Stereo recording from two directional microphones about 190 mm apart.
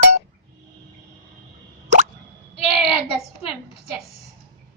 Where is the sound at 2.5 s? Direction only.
30° left (ahead or behind).